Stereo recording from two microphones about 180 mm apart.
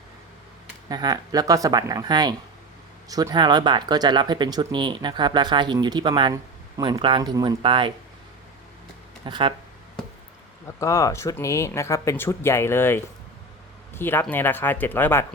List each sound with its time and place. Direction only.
0.9 s speech: 20° right (ahead or behind)
9.2 s speech: 25° right (ahead or behind)
10.8 s speech: 20° left (ahead or behind)